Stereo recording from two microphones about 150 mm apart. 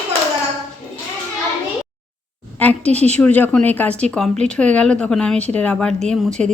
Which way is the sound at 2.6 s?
10° left (ahead or behind).